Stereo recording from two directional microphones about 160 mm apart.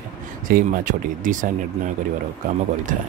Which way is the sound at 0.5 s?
60° right (ahead or behind).